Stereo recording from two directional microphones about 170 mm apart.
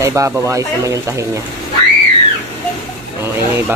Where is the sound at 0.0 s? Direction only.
15° right (ahead or behind).